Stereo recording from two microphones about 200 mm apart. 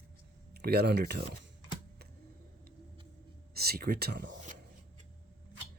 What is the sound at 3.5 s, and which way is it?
Speech, 50° right (ahead or behind).